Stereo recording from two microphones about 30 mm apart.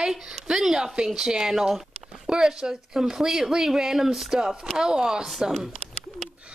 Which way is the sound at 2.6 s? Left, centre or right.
Centre.